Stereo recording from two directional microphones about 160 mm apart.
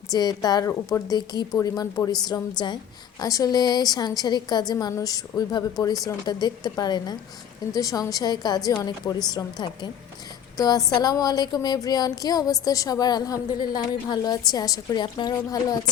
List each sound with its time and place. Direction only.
0.1 s speech: 25° left (ahead or behind)